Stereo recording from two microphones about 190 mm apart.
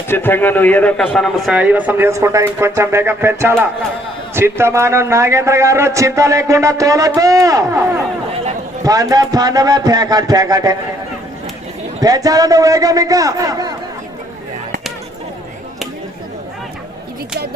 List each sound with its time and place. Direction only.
0.1 s a man's voice: 10° left (ahead or behind); by 8.0 s 15° right (ahead or behind)
8.3 s a sound: 35° right (ahead or behind)
8.8 s speech: 20° right (ahead or behind)
11.9 s speech: 20° right (ahead or behind)